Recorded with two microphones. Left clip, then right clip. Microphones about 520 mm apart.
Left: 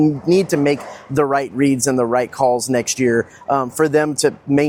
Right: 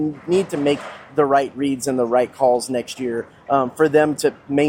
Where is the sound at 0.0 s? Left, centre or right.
Left.